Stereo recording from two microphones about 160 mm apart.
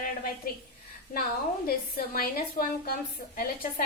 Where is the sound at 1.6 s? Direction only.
65° left (ahead or behind).